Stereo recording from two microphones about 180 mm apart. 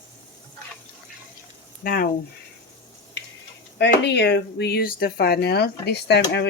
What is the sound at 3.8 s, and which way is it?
Speech, 70° left (ahead or behind).